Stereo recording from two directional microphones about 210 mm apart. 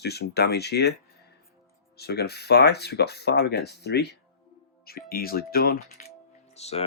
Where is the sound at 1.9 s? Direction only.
50° left (ahead or behind).